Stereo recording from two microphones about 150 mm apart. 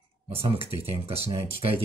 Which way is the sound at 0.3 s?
40° right (ahead or behind).